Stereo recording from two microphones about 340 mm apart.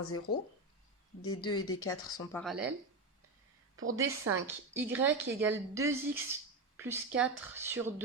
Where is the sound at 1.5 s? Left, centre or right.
Left.